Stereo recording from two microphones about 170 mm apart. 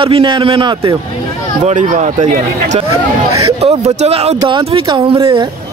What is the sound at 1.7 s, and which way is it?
A man's voice, 45° right (ahead or behind).